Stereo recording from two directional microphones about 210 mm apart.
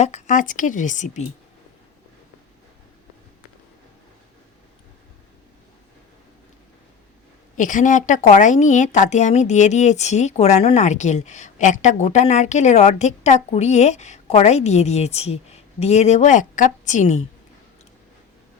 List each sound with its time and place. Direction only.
0.0 s a woman's voice: 35° left (ahead or behind)
7.5 s a woman's voice: 40° left (ahead or behind)